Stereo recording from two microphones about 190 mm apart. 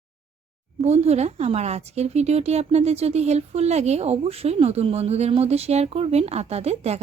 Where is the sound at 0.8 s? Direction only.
35° right (ahead or behind).